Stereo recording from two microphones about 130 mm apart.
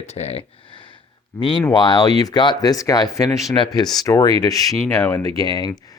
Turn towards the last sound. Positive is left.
turn(degrees=30)  # may be behind; listen again after turning